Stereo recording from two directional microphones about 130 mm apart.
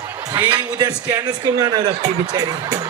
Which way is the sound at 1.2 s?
35° right (ahead or behind).